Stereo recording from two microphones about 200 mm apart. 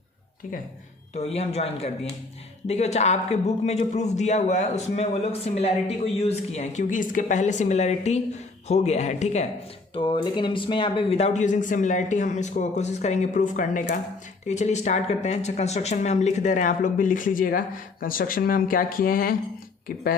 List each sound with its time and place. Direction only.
1.1 s a man's voice: 30° left (ahead or behind); by 20.0 s 45° left (ahead or behind)